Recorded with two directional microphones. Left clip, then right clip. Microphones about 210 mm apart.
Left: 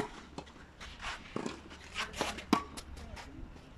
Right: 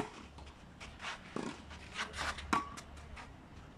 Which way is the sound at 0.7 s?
Centre (ahead or behind).